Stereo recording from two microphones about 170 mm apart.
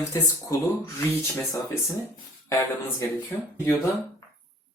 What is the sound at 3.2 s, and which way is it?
Speech, 15° left (ahead or behind).